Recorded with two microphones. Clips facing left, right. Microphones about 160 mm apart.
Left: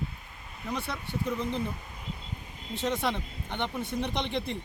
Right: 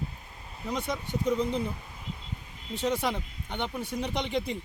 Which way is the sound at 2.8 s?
10° right (ahead or behind).